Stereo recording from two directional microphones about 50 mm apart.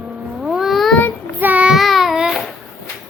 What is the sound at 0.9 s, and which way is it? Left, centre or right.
Child singing, left.